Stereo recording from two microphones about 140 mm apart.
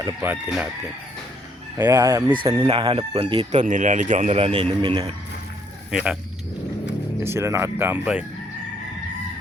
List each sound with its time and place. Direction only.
0.0 s speech: 20° right (ahead or behind)
1.8 s speech: 20° right (ahead or behind)
2.3 s chicken: 35° right (ahead or behind)
3.5 s speech: 60° right (ahead or behind)
4.4 s a man's voice: 45° right (ahead or behind)
5.9 s speech: 5° right (ahead or behind)
7.2 s speech: 20° right (ahead or behind)